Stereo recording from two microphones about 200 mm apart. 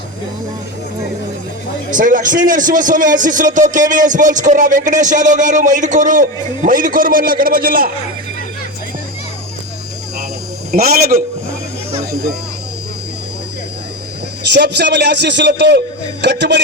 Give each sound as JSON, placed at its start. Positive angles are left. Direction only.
{"t": 1.9, "sound": "speech", "side_deg": -40}
{"t": 10.7, "sound": "a man's voice", "side_deg": -50}
{"t": 14.5, "sound": "a man's voice", "side_deg": -60}